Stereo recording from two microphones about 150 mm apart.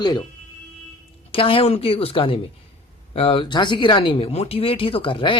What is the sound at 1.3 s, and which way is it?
Speech, 35° left (ahead or behind).